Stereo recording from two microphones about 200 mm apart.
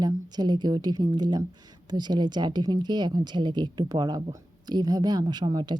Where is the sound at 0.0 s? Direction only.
20° right (ahead or behind).